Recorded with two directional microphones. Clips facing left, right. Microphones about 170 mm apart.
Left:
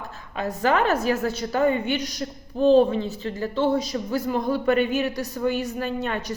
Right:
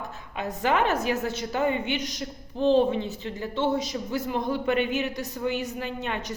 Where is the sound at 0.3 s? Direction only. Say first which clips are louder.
Left 3 dB; 20° right (ahead or behind).